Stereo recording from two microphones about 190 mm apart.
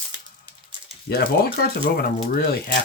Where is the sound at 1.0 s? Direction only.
55° left (ahead or behind).